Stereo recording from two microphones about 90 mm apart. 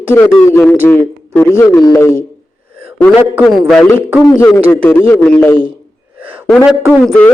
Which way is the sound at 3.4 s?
Centre (ahead or behind).